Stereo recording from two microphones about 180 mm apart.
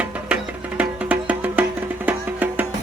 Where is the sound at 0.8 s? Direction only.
10° right (ahead or behind).